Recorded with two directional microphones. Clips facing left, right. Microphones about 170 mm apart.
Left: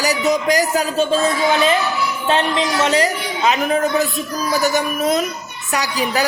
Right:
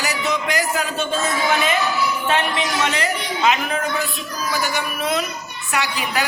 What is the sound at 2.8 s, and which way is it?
A woman's voice, 35° left (ahead or behind).